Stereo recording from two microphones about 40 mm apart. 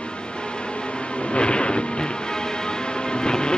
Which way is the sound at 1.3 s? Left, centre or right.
Left.